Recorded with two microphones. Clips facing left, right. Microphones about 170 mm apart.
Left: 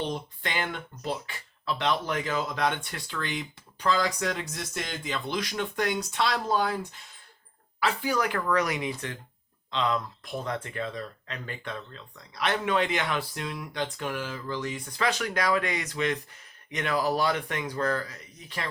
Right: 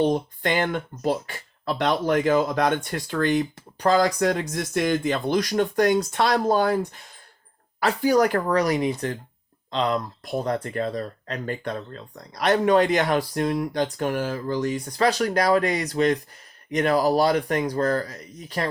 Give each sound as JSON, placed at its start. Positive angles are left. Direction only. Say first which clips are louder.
{"t": 0.0, "sound": "speech", "louder": "right 10 dB", "side_deg": -45}